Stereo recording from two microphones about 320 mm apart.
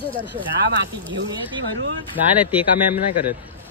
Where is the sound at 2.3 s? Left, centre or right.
Centre.